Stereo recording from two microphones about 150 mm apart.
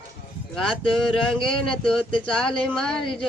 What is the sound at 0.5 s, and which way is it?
Speech, 5° left (ahead or behind).